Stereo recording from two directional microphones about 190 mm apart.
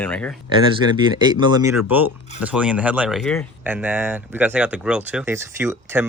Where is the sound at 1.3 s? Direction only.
25° right (ahead or behind).